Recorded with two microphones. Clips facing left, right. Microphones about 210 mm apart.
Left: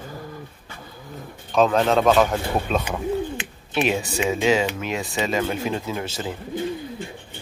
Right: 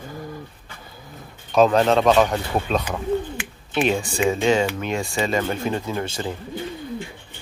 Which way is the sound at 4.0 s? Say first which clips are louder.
Right 1 dB; 25° left (ahead or behind).